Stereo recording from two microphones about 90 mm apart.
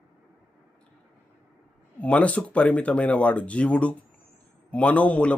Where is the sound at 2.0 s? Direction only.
15° left (ahead or behind).